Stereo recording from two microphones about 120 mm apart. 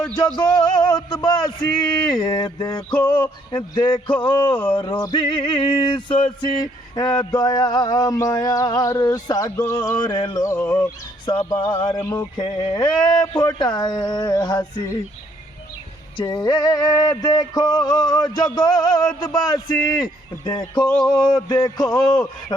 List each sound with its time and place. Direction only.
0.3 s male singing: 35° left (ahead or behind)
9.6 s a sound: 30° left (ahead or behind)
10.0 s male singing: 35° left (ahead or behind)
16.1 s male singing: 35° left (ahead or behind)